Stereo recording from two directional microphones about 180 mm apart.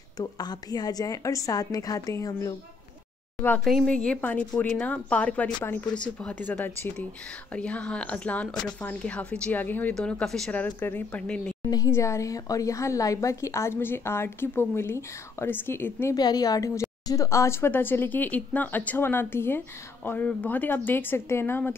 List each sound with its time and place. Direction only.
0.2 s a woman's voice: 20° left (ahead or behind); by 11.5 s 5° left (ahead or behind)
11.7 s speech: 15° left (ahead or behind)